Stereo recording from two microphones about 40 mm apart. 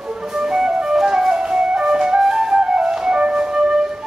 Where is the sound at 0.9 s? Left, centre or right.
Centre.